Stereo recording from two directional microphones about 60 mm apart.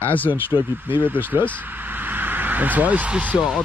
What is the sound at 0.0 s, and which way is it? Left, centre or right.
Speech, left.